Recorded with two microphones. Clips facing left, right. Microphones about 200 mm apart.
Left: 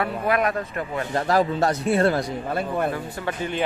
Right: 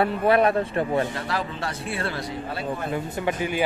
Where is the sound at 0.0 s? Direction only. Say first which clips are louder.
Right 3 dB; 30° right (ahead or behind).